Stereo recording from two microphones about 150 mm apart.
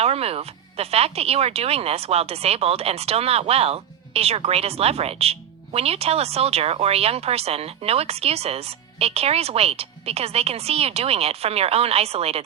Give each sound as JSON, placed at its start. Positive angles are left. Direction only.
{"t": 0.0, "sound": "speech", "side_deg": -40}